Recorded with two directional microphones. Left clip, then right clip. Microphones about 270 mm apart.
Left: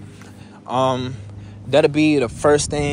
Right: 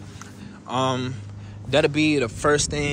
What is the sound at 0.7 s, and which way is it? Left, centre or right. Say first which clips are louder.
Speech: left 5 dB; centre.